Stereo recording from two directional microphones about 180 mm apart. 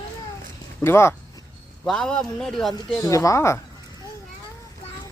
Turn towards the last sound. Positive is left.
turn(degrees=15)  # may be behind; listen again after turning